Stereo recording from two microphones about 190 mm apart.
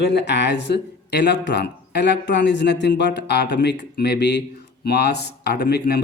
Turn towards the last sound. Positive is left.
turn(degrees=60)  # may be behind; listen again after turning